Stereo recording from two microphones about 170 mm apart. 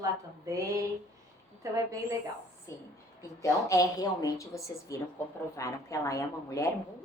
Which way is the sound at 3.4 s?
20° left (ahead or behind).